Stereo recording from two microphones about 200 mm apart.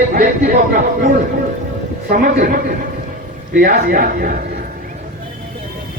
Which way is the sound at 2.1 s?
45° right (ahead or behind).